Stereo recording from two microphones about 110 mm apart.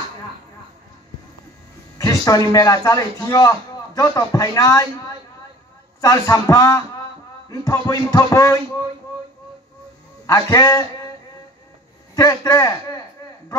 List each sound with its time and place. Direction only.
2.0 s a man's voice: 30° left (ahead or behind)
5.9 s a man's voice: 30° left (ahead or behind)
10.2 s a man's voice: 30° left (ahead or behind)
12.2 s a man's voice: 30° left (ahead or behind)